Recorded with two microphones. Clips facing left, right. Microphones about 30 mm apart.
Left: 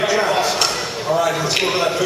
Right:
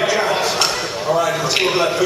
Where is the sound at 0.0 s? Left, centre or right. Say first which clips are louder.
Even; centre.